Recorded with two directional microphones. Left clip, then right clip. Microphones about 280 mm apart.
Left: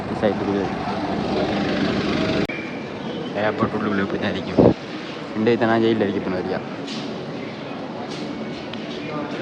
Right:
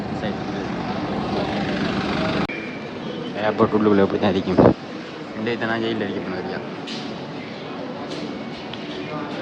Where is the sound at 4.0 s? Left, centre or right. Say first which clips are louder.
Right 5 dB; centre.